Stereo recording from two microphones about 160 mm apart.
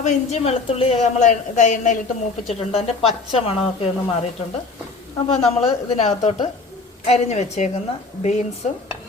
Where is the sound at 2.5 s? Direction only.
40° left (ahead or behind).